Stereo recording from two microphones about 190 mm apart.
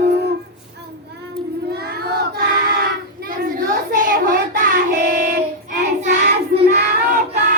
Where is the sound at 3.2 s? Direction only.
45° right (ahead or behind).